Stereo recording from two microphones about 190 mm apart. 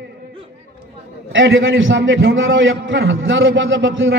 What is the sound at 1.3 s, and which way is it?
A man's voice, 80° right.